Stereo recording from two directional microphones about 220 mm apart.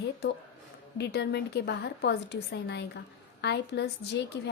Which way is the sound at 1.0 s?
50° left (ahead or behind).